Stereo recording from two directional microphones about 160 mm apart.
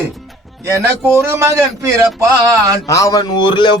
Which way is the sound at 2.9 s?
20° left (ahead or behind).